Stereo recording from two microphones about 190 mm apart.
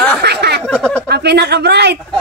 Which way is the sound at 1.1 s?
60° right (ahead or behind).